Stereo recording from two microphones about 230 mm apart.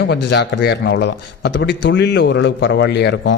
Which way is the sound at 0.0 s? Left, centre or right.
Left.